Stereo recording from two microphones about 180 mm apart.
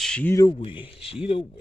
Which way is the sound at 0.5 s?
30° left (ahead or behind).